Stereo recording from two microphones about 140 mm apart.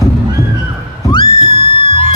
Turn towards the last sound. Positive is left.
turn(degrees=40)  # may be behind; listen again after turning